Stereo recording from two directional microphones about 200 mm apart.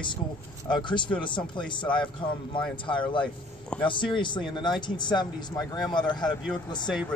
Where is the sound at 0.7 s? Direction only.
25° left (ahead or behind).